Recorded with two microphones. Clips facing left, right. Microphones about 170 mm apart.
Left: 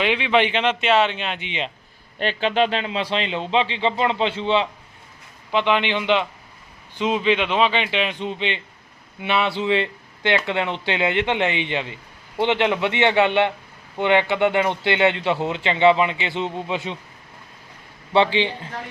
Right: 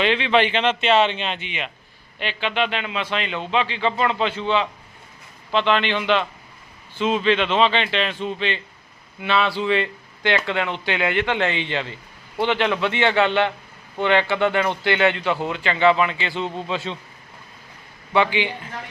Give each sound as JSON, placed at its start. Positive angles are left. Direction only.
{"t": 0.0, "sound": "speech", "side_deg": 10}
{"t": 1.5, "sound": "a man's voice", "side_deg": 25}
{"t": 2.1, "sound": "a man's voice", "side_deg": 40}
{"t": 5.5, "sound": "a man's voice", "side_deg": 15}
{"t": 18.1, "sound": "a man's voice", "side_deg": 30}